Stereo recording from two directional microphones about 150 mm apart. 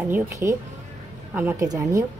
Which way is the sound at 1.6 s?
25° right (ahead or behind).